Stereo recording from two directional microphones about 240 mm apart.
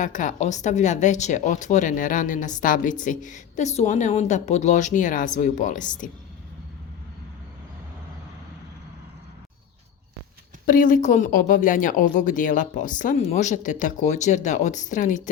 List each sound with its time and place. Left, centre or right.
0.0 s speech: left
10.7 s speech: left